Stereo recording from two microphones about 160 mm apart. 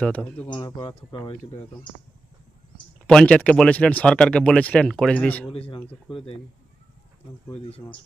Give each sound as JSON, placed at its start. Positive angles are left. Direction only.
{"t": 0.0, "sound": "speech", "side_deg": 5}
{"t": 0.4, "sound": "speech", "side_deg": 30}
{"t": 3.1, "sound": "speech", "side_deg": 5}
{"t": 5.7, "sound": "speech", "side_deg": 30}
{"t": 7.6, "sound": "speech", "side_deg": 35}